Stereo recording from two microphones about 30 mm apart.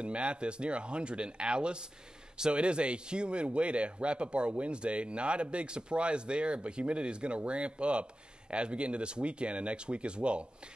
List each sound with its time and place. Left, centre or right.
0.0 s speech: right